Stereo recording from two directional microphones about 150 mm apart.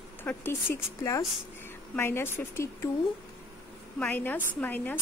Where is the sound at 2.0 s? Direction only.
15° left (ahead or behind).